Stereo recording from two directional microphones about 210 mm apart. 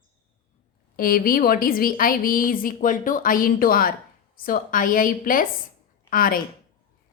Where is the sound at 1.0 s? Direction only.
45° left (ahead or behind).